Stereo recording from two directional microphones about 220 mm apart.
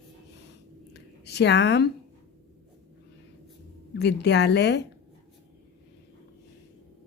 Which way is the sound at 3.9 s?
50° left (ahead or behind).